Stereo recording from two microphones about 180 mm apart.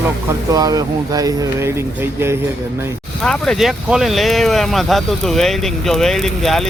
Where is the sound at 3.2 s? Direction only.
Centre (ahead or behind).